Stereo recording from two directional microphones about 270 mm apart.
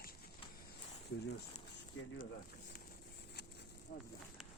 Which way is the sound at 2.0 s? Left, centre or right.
Left.